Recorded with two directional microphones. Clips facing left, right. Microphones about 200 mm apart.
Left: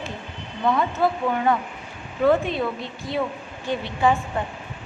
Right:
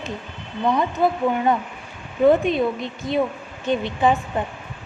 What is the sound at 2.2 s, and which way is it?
A woman's voice, 20° right (ahead or behind).